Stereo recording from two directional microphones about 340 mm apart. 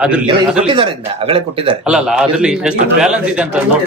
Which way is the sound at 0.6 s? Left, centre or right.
Centre.